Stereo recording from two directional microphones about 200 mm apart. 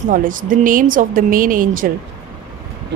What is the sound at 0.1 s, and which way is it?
A woman's voice, 45° right (ahead or behind).